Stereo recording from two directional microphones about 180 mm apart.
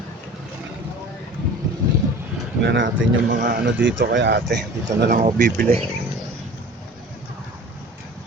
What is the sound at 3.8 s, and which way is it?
Speech, 80° right.